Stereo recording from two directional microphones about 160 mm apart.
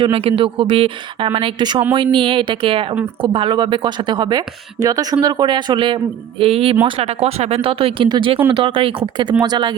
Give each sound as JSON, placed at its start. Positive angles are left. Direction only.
{"t": 0.0, "sound": "speech", "side_deg": -35}